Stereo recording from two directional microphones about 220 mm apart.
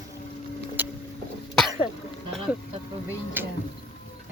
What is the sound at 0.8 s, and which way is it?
Boat, 10° right (ahead or behind).